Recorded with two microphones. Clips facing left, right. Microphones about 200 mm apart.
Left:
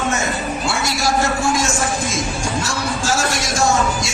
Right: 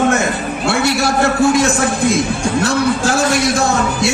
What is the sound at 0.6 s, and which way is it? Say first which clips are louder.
A man's voice: right 7 dB; 60° right (ahead or behind).